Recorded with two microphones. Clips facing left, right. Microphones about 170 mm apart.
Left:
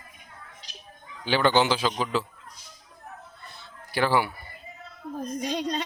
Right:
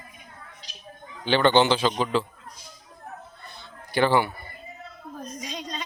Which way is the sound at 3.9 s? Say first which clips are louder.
Right 3 dB; 5° left (ahead or behind).